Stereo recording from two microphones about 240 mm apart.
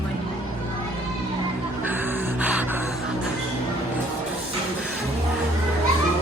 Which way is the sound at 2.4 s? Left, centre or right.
Centre.